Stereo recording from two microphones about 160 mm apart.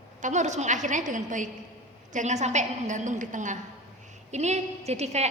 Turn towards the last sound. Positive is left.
turn(degrees=-45)  # may be behind; listen again after turning